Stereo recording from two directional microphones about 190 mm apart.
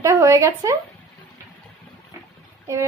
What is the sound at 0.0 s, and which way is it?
Speech, 20° right (ahead or behind).